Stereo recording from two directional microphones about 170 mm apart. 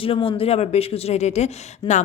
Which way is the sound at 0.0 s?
35° left (ahead or behind).